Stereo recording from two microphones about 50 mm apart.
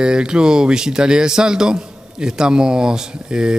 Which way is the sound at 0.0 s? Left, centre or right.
Centre.